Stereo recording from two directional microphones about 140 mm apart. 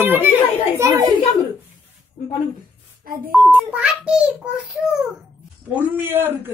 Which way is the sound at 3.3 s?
10° right (ahead or behind).